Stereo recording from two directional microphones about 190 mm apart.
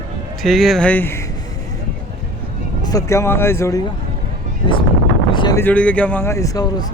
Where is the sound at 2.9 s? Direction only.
15° left (ahead or behind).